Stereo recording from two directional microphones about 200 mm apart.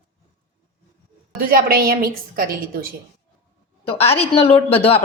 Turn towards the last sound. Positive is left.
turn(degrees=30)  # may be behind; listen again after turning